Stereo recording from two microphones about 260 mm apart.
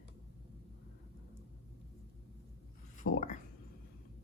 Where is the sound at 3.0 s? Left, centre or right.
Left.